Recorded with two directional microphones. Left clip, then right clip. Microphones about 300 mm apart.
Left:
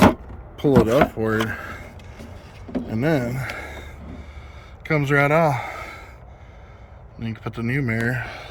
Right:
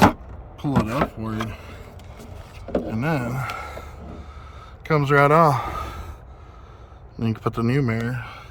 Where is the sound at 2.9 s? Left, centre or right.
Centre.